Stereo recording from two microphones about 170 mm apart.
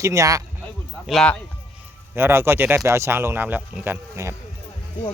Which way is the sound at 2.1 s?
15° right (ahead or behind).